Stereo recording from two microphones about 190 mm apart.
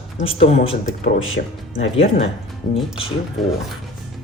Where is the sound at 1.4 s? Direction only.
50° left (ahead or behind).